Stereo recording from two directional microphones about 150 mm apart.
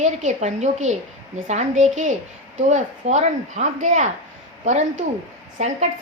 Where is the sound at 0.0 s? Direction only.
55° right (ahead or behind).